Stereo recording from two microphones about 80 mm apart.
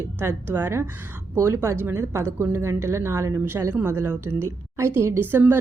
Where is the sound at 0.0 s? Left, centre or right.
Right.